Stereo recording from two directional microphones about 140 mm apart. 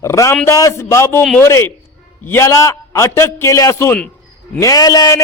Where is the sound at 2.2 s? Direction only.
15° left (ahead or behind).